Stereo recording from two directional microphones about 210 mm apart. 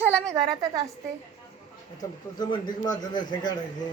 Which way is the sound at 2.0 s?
20° left (ahead or behind).